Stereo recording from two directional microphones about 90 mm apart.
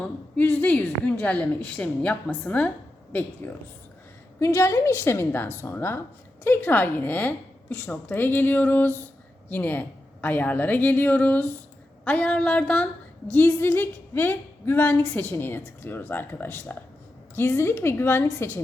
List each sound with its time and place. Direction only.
0.3 s a woman's voice: 20° left (ahead or behind)
4.4 s a woman's voice: 30° left (ahead or behind)